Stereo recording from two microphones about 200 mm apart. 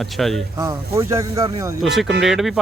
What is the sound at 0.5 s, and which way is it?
Speech, 15° right (ahead or behind).